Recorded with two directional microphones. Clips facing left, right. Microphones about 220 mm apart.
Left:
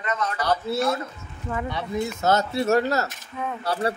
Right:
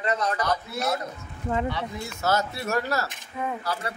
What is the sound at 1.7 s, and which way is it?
Speech, 20° left (ahead or behind).